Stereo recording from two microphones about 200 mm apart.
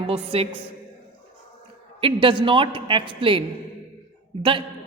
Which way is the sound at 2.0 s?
25° right (ahead or behind).